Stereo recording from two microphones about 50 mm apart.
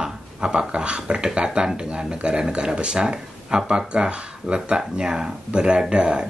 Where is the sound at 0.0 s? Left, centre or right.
Centre.